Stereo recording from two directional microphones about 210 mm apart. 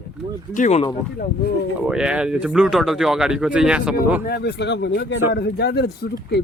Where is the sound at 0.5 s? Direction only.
35° left (ahead or behind).